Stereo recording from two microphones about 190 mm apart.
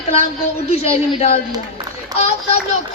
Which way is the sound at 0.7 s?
35° left (ahead or behind).